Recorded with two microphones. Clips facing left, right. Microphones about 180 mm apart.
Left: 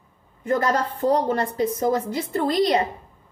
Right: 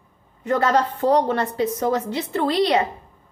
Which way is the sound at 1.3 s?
35° left (ahead or behind).